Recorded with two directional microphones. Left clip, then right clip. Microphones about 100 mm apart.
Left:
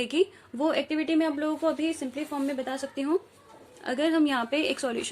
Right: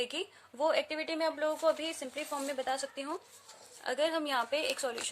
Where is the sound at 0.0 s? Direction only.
20° right (ahead or behind).